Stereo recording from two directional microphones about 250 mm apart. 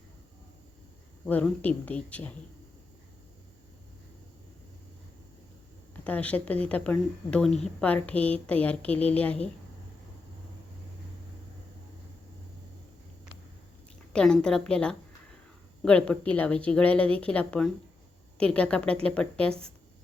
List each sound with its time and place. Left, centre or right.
1.2 s speech: centre
6.1 s speech: centre
14.1 s speech: centre